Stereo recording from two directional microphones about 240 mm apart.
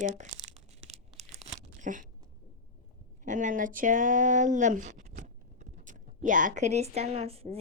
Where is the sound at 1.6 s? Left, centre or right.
Right.